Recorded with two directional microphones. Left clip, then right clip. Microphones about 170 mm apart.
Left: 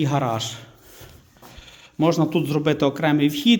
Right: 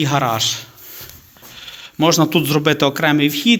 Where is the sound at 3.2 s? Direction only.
15° left (ahead or behind).